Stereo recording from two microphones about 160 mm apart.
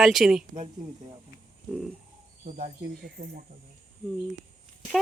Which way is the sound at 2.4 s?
50° right (ahead or behind).